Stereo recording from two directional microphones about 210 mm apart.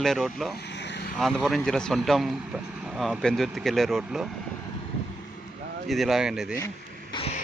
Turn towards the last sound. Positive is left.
turn(degrees=30)  # may be behind; listen again after turning